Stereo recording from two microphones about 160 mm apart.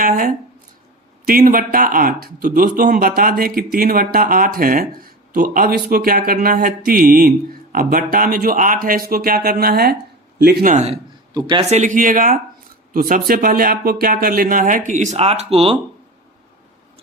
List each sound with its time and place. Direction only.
1.3 s speech: 60° right (ahead or behind)
11.3 s speech: 30° right (ahead or behind)
11.7 s speech: 55° right (ahead or behind); by 15.8 s 40° right (ahead or behind)